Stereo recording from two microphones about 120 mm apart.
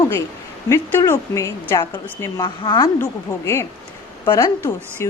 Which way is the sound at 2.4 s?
40° left (ahead or behind).